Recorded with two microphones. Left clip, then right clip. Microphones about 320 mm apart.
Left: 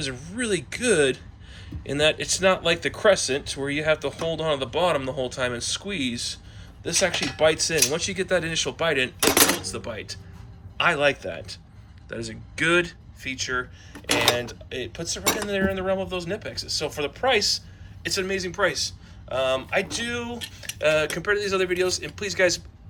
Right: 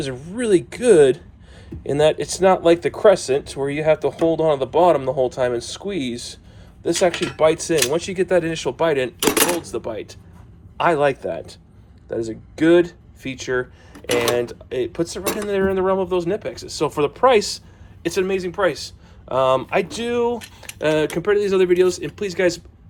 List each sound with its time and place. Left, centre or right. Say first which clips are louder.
0.0 s speech: right 5 dB; centre